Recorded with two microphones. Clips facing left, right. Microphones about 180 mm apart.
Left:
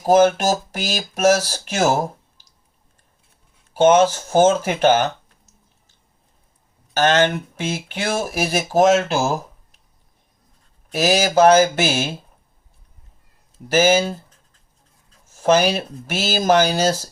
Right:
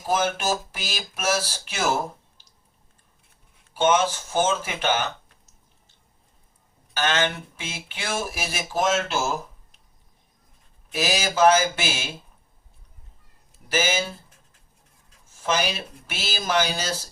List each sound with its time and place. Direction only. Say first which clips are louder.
0.0 s speech: left 10 dB; 40° left (ahead or behind)
3.8 s speech: left 7 dB; 40° left (ahead or behind)
6.9 s speech: left 8 dB; 45° left (ahead or behind)
10.9 s speech: left 8 dB; 40° left (ahead or behind)
13.7 s speech: left 9 dB; 40° left (ahead or behind)
15.3 s speech: left 9 dB; 40° left (ahead or behind)